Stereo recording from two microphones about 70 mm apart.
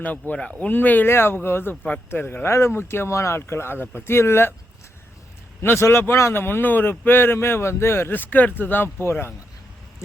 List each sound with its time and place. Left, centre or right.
0.0 s speech: left
5.6 s speech: left